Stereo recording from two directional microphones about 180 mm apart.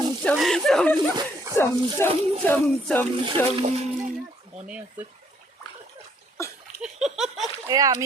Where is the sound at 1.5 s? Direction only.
15° left (ahead or behind).